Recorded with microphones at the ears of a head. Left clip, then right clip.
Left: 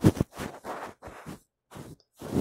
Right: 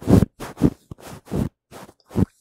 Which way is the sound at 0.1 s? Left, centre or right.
Right.